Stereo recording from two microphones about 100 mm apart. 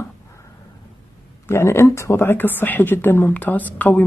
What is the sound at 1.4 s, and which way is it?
A woman's voice, 25° left (ahead or behind).